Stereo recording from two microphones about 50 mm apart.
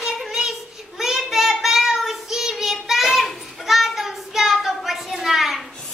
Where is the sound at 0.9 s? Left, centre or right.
Centre.